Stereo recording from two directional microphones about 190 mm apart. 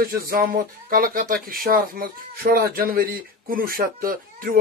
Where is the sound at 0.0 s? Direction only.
50° right (ahead or behind).